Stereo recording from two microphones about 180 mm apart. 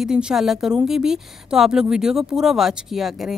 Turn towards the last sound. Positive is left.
turn(degrees=0)  # may be behind; listen again after turning